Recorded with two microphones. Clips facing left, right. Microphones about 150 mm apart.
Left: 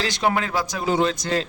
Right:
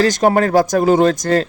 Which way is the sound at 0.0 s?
45° right (ahead or behind).